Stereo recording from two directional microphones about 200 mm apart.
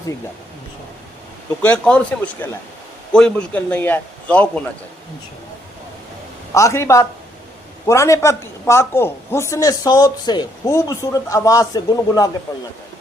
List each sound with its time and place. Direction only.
1.6 s a man's voice: 5° left (ahead or behind)
6.5 s a man's voice: 15° left (ahead or behind)